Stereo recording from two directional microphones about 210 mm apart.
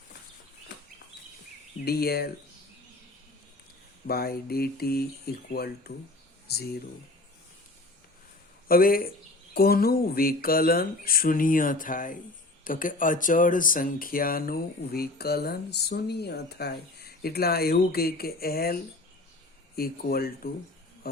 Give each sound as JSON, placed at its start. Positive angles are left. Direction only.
{"t": 1.8, "sound": "speech", "side_deg": 50}
{"t": 4.0, "sound": "speech", "side_deg": 45}
{"t": 8.6, "sound": "speech", "side_deg": 45}